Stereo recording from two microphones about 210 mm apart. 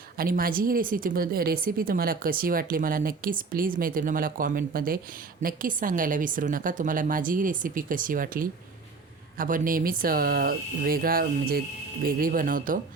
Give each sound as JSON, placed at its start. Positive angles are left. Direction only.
{"t": 0.2, "sound": "a woman's voice", "side_deg": -45}